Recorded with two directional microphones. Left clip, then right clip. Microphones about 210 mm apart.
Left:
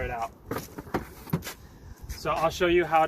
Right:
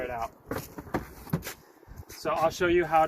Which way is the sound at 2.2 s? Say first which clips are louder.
Left 1 dB; 10° right (ahead or behind).